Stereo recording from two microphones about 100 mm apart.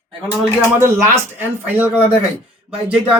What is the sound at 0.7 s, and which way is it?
Speech, 25° right (ahead or behind).